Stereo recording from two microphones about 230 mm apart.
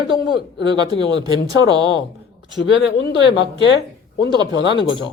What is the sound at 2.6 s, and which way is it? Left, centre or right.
Speech, left.